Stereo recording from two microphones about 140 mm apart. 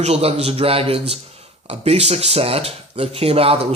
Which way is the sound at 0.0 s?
45° right (ahead or behind).